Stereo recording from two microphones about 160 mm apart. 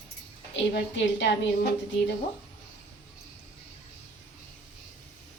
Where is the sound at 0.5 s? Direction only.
90° left.